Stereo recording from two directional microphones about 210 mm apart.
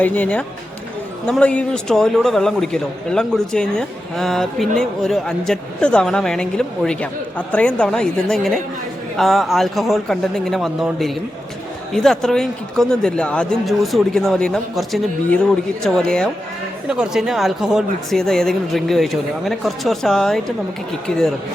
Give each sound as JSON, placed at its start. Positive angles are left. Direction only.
{"t": 0.0, "sound": "a man's voice", "side_deg": 5}